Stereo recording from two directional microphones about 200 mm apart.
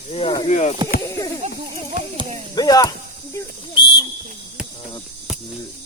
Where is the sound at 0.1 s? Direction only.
25° left (ahead or behind).